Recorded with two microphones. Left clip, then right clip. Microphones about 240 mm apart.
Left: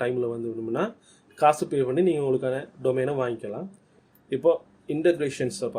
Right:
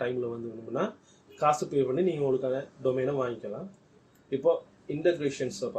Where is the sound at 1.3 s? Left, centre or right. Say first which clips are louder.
Left 5 dB; left.